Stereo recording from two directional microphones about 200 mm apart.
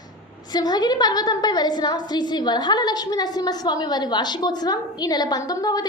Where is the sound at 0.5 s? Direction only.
20° left (ahead or behind).